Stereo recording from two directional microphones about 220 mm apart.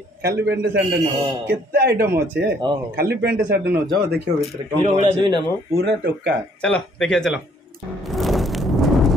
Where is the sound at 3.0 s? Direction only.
45° right (ahead or behind).